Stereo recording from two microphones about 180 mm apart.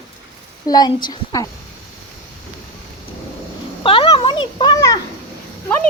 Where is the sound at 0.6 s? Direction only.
20° left (ahead or behind).